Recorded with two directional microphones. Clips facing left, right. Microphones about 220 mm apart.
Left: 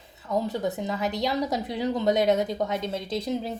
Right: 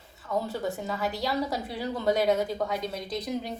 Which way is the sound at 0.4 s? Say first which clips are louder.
Left 3 dB; 20° left (ahead or behind).